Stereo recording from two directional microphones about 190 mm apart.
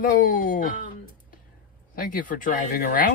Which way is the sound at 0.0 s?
45° left (ahead or behind).